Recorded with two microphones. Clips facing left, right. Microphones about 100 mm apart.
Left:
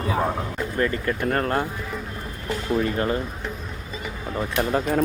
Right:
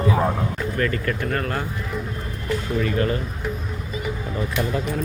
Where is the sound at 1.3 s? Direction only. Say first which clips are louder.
Left 3 dB; 35° left (ahead or behind).